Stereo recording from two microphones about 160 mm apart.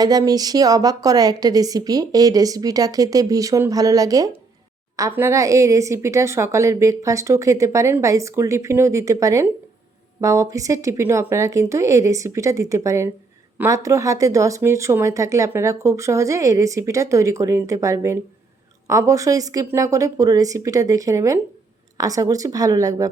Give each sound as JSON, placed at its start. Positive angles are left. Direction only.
{"t": 0.0, "sound": "speech", "side_deg": -25}